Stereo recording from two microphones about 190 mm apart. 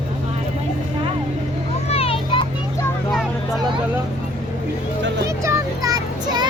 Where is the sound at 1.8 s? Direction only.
30° left (ahead or behind).